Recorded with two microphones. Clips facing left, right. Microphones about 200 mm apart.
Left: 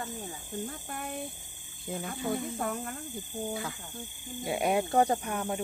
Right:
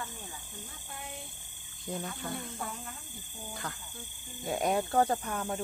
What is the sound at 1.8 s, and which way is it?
Speech, 5° left (ahead or behind).